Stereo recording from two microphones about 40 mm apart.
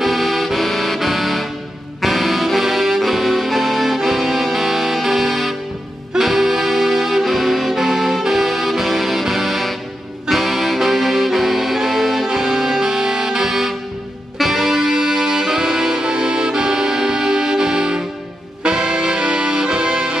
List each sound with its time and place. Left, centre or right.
0.0 s music: centre
6.1 s saxophone: centre
10.2 s music: centre